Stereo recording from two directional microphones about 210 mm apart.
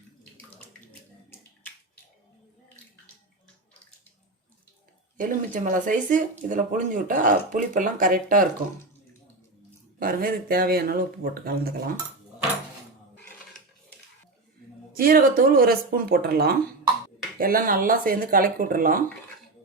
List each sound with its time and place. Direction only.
5.1 s speech: 40° right (ahead or behind)
10.0 s speech: 40° right (ahead or behind)
14.9 s speech: 45° right (ahead or behind)